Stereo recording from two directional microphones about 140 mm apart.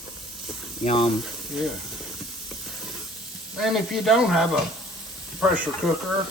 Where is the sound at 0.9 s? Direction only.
40° left (ahead or behind).